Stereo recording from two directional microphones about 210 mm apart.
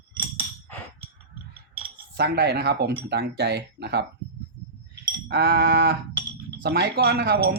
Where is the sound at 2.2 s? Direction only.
50° right (ahead or behind).